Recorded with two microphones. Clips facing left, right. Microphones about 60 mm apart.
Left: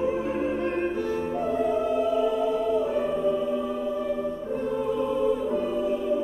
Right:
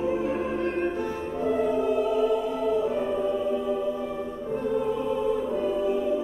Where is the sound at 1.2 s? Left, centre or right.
Centre.